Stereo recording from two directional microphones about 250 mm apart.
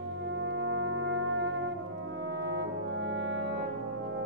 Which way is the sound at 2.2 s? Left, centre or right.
Right.